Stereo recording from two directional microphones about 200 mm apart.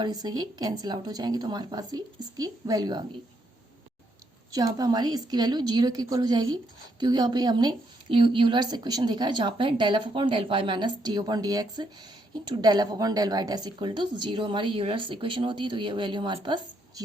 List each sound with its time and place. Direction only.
0.0 s a woman's voice: 20° right (ahead or behind)
4.5 s a woman's voice: 20° right (ahead or behind)